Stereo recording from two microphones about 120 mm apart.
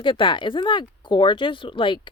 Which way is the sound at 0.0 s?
45° left (ahead or behind).